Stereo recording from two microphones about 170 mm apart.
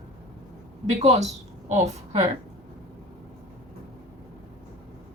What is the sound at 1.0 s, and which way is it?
A woman's voice, 40° right (ahead or behind).